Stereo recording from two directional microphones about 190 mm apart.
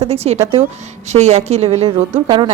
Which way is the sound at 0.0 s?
30° right (ahead or behind).